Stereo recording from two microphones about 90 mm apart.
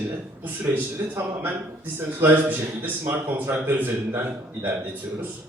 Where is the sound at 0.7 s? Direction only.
25° right (ahead or behind).